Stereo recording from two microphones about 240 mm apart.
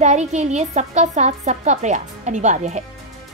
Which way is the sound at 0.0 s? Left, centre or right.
Right.